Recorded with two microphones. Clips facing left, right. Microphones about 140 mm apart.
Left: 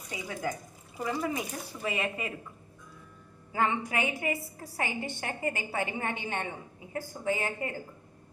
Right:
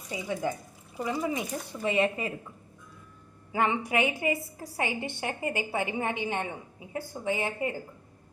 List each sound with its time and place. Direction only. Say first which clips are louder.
0.1 s a woman's voice: right 4 dB; 25° right (ahead or behind)
3.5 s a woman's voice: right 2 dB; 20° right (ahead or behind)